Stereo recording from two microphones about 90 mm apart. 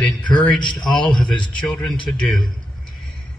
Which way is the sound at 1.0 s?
10° left (ahead or behind).